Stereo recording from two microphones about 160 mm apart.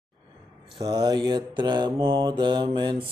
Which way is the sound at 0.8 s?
25° right (ahead or behind).